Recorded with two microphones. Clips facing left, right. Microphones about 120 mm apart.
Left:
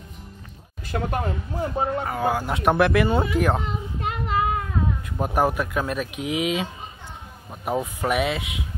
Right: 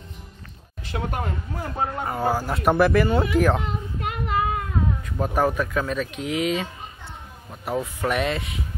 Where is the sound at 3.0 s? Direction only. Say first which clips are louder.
Even; 25° left (ahead or behind).